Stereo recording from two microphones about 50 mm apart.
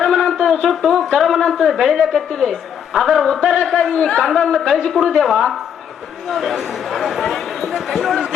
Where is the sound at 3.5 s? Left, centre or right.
Centre.